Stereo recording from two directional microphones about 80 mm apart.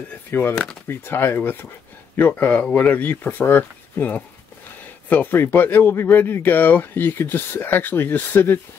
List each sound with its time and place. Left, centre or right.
0.3 s speech: left